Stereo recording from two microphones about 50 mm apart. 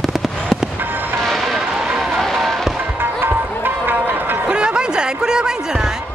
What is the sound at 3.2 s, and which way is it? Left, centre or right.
Run, right.